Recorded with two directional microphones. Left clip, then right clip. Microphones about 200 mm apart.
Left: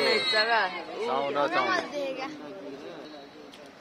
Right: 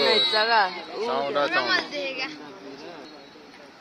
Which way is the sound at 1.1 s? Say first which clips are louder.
Right 3 dB; centre (ahead or behind).